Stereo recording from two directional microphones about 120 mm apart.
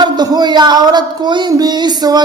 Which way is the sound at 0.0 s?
35° right (ahead or behind).